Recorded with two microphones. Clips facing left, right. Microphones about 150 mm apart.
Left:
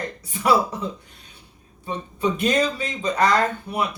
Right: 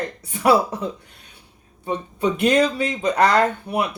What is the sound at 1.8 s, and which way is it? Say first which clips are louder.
Speech: right 2 dB; 65° right (ahead or behind).